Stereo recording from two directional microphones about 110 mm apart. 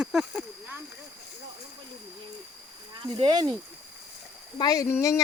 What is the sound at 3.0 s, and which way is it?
Speech, 45° right (ahead or behind).